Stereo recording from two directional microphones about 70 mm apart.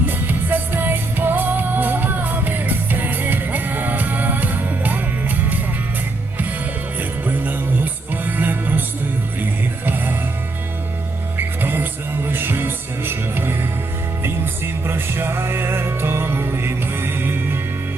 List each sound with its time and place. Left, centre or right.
0.0 s music: right
7.3 s music: right
11.3 s music: right